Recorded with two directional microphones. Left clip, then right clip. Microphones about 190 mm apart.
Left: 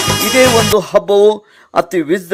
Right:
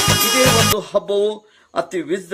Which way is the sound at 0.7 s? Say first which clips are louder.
Left 8 dB; 45° left (ahead or behind).